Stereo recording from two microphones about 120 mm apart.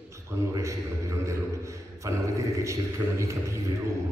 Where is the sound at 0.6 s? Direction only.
25° right (ahead or behind).